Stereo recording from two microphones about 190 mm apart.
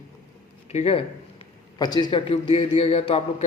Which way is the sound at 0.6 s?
30° left (ahead or behind).